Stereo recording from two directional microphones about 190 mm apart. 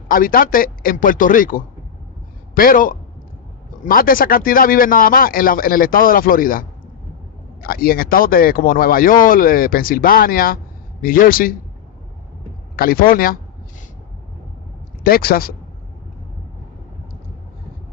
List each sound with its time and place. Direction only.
0.1 s speech: 50° left (ahead or behind)
7.7 s speech: 50° left (ahead or behind)
12.7 s speech: 50° left (ahead or behind)
15.0 s speech: 50° left (ahead or behind)